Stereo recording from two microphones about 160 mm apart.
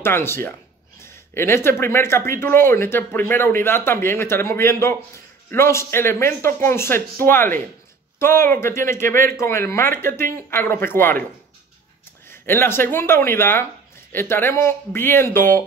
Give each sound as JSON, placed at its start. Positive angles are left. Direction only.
{"t": 0.0, "sound": "speech", "side_deg": 15}
{"t": 12.3, "sound": "speech", "side_deg": 15}